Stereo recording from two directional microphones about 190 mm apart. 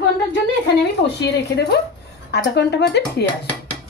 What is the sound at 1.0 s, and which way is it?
Speech, 60° left (ahead or behind).